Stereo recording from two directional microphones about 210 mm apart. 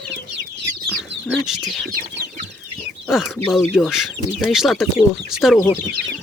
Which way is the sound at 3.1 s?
Centre (ahead or behind).